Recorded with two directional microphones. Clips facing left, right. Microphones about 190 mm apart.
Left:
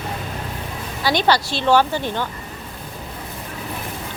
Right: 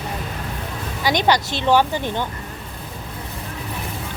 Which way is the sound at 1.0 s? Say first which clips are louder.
Even; 15° right (ahead or behind).